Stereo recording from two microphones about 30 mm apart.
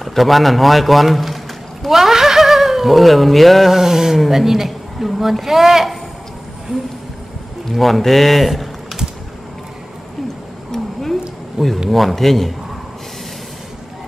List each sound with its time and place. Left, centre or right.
0.0 s a man's voice: centre
3.7 s a woman's voice: centre
7.7 s a man's voice: centre
10.7 s a sound: centre
11.6 s a woman's voice: centre
11.9 s a man's voice: centre